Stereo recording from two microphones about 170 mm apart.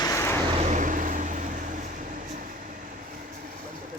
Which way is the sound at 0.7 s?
50° right (ahead or behind).